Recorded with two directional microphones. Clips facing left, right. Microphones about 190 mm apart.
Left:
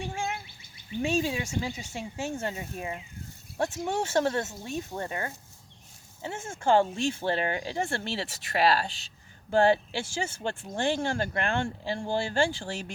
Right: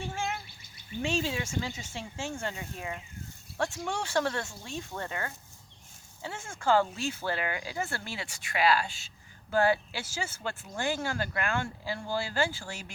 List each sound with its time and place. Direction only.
1.0 s speech: 15° left (ahead or behind)